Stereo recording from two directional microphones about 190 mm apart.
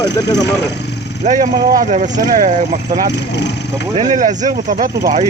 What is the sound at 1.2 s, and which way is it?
Speech, 40° right (ahead or behind).